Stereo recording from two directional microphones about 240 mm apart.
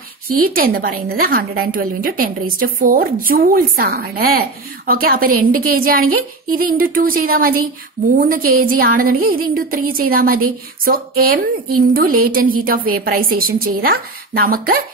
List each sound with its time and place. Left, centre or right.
0.4 s a woman's voice: right